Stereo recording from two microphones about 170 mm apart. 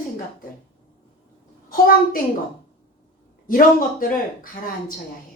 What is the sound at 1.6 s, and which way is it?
Speech, 60° left (ahead or behind).